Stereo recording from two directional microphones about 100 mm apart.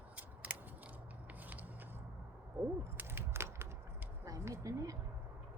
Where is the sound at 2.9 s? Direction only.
25° right (ahead or behind).